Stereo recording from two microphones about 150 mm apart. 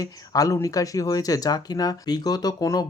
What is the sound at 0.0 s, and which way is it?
Speech, 25° left (ahead or behind).